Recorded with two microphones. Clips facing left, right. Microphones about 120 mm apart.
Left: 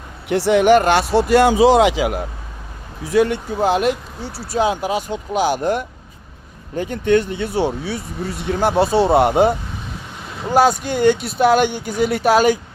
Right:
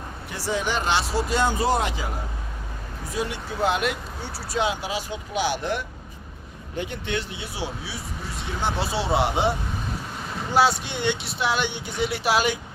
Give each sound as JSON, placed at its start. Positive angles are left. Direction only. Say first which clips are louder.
{"t": 0.3, "sound": "speech", "louder": "left 14 dB", "side_deg": 70}
{"t": 1.1, "sound": "speech", "louder": "left 10 dB", "side_deg": 70}
{"t": 3.0, "sound": "speech", "louder": "left 13 dB", "side_deg": 75}
{"t": 3.6, "sound": "speech", "louder": "left 7 dB", "side_deg": 40}
{"t": 4.2, "sound": "speech", "louder": "left 5 dB", "side_deg": 10}
{"t": 4.4, "sound": "speech", "louder": "left 7 dB", "side_deg": 40}
{"t": 10.5, "sound": "speech", "louder": "left 6 dB", "side_deg": 45}